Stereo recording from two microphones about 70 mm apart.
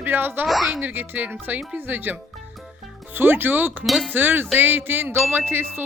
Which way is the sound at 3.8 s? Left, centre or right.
Centre.